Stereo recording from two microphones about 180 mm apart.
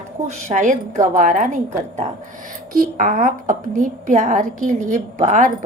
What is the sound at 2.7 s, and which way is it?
A woman's voice, 50° right (ahead or behind).